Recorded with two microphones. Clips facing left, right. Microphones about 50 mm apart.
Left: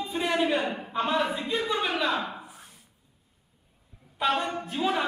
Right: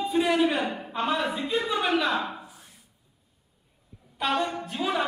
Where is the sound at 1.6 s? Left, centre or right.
Centre.